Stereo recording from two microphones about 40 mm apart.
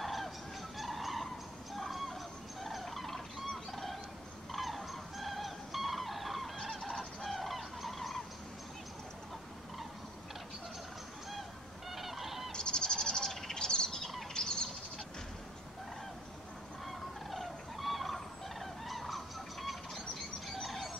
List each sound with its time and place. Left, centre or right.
0.0 s fowl: centre
0.7 s turkey: centre
2.6 s music: centre
11.9 s fowl: centre
12.5 s bird: left
14.3 s bird flight: centre
16.8 s turkey: centre
20.6 s music: centre